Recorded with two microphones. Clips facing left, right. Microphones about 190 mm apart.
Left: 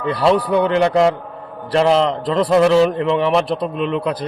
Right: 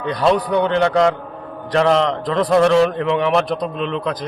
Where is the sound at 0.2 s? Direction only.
5° left (ahead or behind).